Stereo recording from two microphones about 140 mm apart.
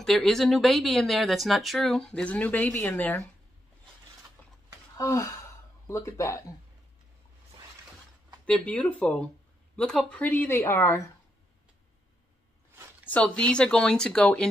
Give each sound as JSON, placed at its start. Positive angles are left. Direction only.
{"t": 0.0, "sound": "speech", "side_deg": 0}
{"t": 4.9, "sound": "gasp", "side_deg": 20}
{"t": 5.9, "sound": "speech", "side_deg": 20}
{"t": 8.5, "sound": "speech", "side_deg": 10}
{"t": 13.1, "sound": "speech", "side_deg": 10}